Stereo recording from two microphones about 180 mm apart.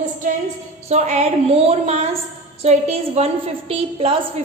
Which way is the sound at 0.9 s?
40° right (ahead or behind).